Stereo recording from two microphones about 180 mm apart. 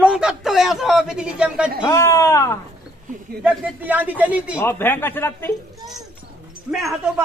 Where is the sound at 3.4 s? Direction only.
10° right (ahead or behind).